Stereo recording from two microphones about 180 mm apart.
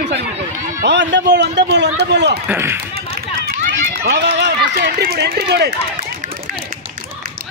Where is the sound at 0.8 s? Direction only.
75° right (ahead or behind).